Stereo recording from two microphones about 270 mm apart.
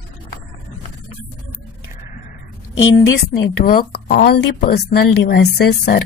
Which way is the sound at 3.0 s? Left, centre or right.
Left.